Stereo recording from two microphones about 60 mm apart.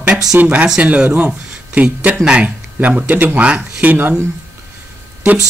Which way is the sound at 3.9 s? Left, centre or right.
Right.